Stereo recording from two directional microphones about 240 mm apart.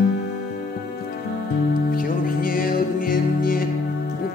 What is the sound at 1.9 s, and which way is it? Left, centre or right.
Music, left.